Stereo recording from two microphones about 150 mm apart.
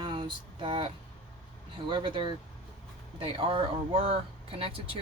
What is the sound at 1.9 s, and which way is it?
Speech, 35° right (ahead or behind).